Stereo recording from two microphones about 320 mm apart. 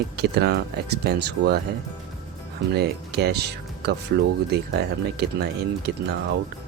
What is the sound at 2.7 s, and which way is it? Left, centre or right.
Speech, right.